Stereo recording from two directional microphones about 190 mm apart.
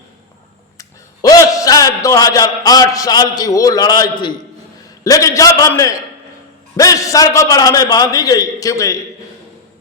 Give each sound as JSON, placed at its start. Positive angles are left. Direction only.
{"t": 0.8, "sound": "a man's voice", "side_deg": 20}